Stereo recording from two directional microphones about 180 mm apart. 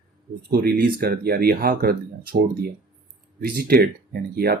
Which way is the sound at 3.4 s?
55° right (ahead or behind).